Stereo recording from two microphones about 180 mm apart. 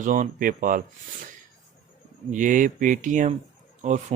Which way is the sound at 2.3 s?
45° right (ahead or behind).